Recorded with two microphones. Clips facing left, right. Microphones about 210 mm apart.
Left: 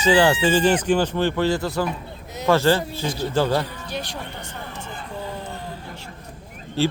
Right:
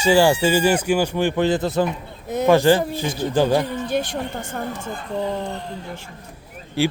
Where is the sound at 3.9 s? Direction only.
50° right (ahead or behind).